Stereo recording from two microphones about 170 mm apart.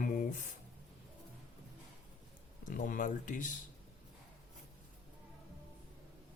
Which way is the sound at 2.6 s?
50° left (ahead or behind).